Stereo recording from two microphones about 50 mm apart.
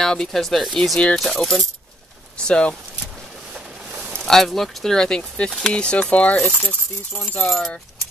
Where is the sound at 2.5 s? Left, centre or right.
Left.